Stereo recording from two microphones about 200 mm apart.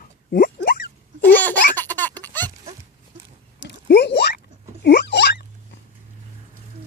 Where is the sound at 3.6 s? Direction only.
60° left (ahead or behind).